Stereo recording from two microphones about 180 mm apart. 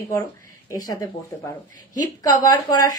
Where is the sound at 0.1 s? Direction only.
15° left (ahead or behind).